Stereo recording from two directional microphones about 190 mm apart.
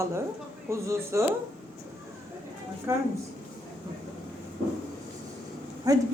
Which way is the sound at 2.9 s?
15° right (ahead or behind).